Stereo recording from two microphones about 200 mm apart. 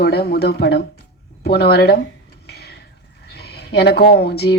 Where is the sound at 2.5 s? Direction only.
55° left (ahead or behind).